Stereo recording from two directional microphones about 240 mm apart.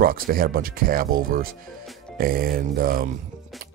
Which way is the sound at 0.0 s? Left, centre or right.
Right.